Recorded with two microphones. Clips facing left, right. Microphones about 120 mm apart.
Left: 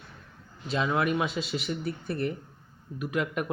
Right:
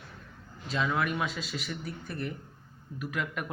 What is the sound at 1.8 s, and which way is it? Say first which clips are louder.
Speech: left 6 dB; 60° left (ahead or behind).